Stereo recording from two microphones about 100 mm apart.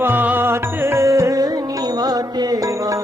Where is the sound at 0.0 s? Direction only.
20° right (ahead or behind); by 3.0 s 35° right (ahead or behind).